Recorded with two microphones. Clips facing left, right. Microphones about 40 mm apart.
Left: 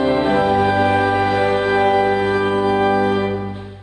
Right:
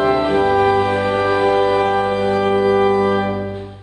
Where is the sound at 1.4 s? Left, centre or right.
Centre.